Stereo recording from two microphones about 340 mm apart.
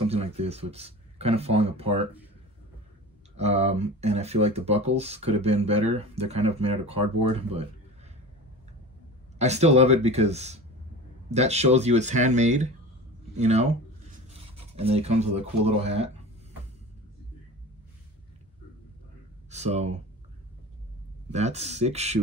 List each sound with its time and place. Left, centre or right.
0.1 s speech: centre
3.3 s speech: centre
9.4 s speech: centre
19.5 s speech: centre
21.3 s speech: centre